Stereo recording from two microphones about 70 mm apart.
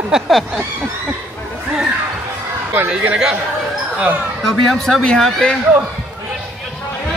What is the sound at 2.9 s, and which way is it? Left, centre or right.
Speech, centre.